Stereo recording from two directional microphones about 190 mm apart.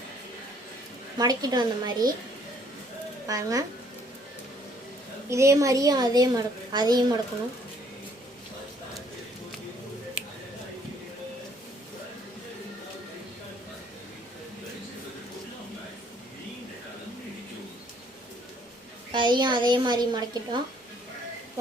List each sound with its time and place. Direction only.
1.2 s a woman's voice: 20° right (ahead or behind)
3.2 s a woman's voice: 20° right (ahead or behind)
5.3 s a woman's voice: 15° right (ahead or behind)
19.1 s a woman's voice: 25° right (ahead or behind)